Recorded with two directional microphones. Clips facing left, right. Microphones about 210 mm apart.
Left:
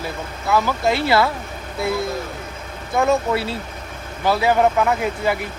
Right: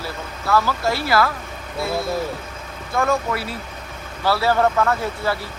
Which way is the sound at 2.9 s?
20° left (ahead or behind).